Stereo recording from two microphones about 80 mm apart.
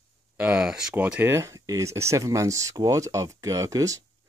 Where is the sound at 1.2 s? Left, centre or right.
Right.